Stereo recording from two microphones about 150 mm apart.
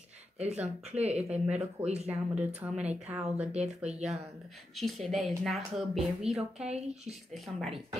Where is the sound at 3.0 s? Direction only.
10° right (ahead or behind).